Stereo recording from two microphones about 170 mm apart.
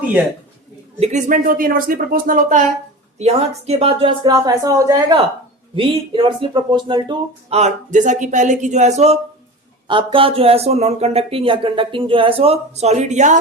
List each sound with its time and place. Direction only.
0.9 s speech: 35° right (ahead or behind)
1.3 s speech: 55° right (ahead or behind)
3.2 s speech: 40° right (ahead or behind)
4.2 s speech: 25° right (ahead or behind)
7.6 s speech: 45° right (ahead or behind)
9.8 s speech: 30° right (ahead or behind); by 13.4 s 45° right (ahead or behind)